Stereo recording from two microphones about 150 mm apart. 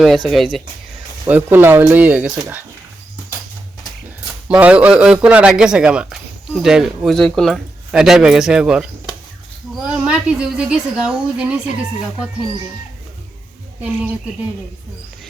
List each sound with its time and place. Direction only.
0.0 s a man's voice: centre (ahead or behind)
1.3 s a woman's voice: 15° right (ahead or behind)
4.4 s a man's voice: 10° right (ahead or behind)
9.9 s a woman's voice: 5° right (ahead or behind)